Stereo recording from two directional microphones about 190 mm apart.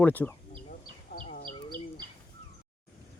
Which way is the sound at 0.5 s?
45° left (ahead or behind).